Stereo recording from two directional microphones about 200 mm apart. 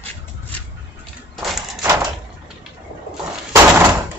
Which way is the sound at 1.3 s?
Centre (ahead or behind).